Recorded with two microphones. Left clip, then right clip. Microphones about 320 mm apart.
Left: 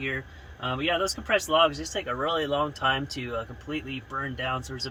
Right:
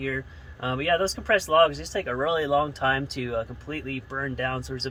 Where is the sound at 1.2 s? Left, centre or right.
Centre.